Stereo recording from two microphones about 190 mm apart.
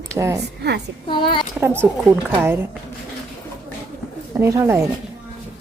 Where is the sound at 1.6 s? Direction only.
10° right (ahead or behind).